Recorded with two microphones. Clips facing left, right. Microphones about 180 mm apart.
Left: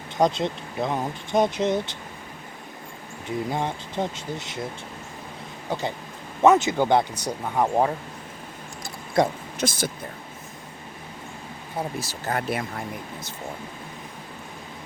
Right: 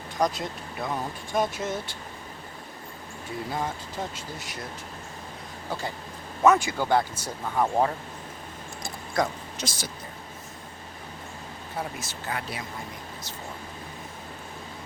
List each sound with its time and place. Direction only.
0.2 s speech: 25° left (ahead or behind)
3.2 s speech: 25° left (ahead or behind)
5.6 s speech: 20° left (ahead or behind)
9.2 s speech: 25° left (ahead or behind)
9.6 s speech: 55° left (ahead or behind)
11.9 s speech: 35° left (ahead or behind)
12.4 s speech: 55° left (ahead or behind)